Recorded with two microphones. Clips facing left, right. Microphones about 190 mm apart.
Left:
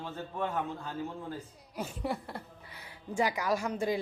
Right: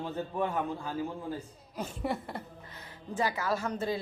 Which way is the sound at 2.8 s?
15° left (ahead or behind).